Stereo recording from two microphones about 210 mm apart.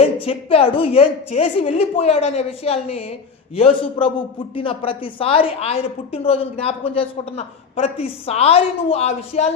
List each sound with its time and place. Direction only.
0.0 s a woman's voice: 30° left (ahead or behind)